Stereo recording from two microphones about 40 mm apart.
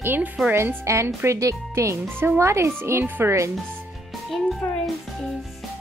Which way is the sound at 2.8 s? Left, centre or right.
Right.